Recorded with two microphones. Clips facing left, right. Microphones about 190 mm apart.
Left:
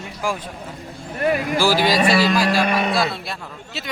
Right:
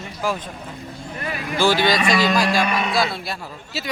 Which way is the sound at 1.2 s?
50° left (ahead or behind).